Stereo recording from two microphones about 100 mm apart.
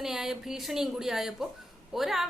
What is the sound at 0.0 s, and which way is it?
A woman's voice, 5° right (ahead or behind).